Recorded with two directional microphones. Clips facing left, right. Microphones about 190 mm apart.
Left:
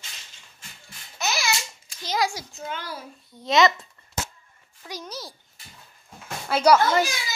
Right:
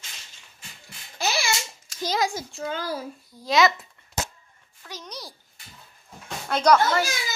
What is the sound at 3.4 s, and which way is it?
Speech, centre (ahead or behind).